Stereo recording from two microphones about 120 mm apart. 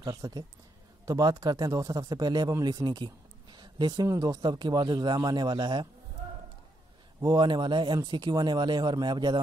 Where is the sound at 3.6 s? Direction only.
35° right (ahead or behind).